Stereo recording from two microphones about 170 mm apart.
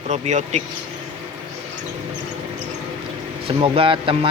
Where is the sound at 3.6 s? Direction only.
30° right (ahead or behind).